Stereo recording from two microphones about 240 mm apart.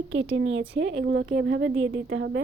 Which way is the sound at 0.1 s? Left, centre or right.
Right.